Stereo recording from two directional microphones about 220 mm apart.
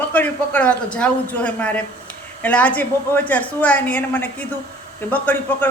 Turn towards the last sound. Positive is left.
turn(degrees=5)  # may be behind; listen again after turning